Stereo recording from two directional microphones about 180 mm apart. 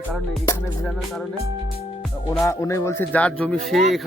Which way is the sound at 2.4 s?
15° left (ahead or behind).